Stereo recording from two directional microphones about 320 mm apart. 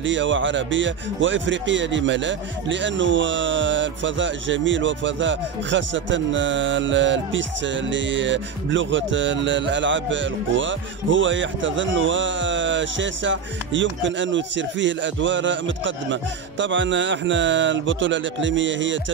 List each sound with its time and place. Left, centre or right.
0.0 s speech: right